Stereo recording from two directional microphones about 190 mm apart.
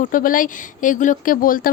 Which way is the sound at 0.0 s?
45° left (ahead or behind).